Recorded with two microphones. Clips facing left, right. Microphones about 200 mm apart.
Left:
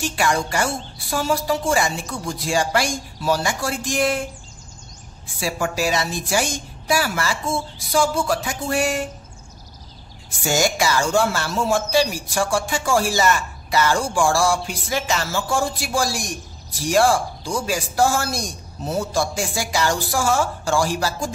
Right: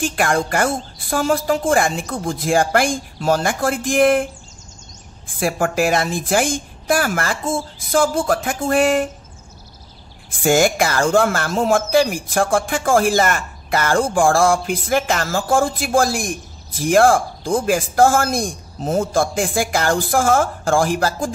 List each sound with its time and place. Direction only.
0.0 s speech: 55° right (ahead or behind)
10.3 s speech: 55° right (ahead or behind)